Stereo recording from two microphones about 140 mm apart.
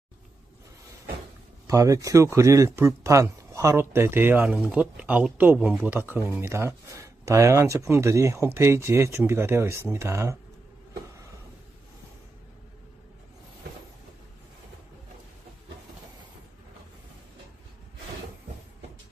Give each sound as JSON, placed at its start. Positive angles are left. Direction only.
{"t": 1.7, "sound": "speech", "side_deg": -25}
{"t": 5.9, "sound": "speech", "side_deg": -15}